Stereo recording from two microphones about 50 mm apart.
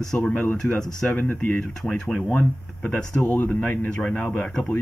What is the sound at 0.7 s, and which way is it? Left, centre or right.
Speech, centre.